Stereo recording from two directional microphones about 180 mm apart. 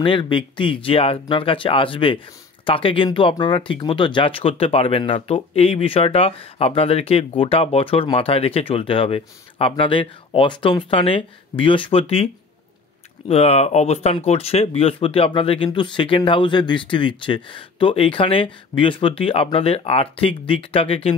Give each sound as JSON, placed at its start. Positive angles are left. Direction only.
{"t": 0.0, "sound": "speech", "side_deg": 30}
{"t": 13.3, "sound": "speech", "side_deg": 35}